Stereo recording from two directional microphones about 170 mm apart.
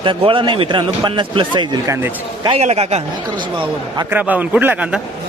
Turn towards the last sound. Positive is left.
turn(degrees=-10)  # may be behind; listen again after turning